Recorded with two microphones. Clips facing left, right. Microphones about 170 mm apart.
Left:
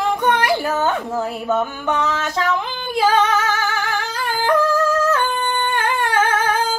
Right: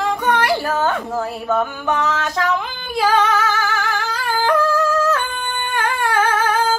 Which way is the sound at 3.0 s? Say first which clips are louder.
Even; 15° left (ahead or behind).